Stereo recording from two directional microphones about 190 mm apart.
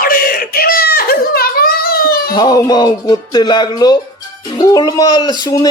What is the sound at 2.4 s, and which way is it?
Speech, 20° left (ahead or behind).